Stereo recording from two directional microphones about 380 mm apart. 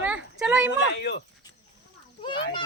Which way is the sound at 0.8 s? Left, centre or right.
Left.